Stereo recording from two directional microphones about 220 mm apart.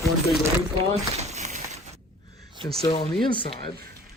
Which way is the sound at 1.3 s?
30° right (ahead or behind).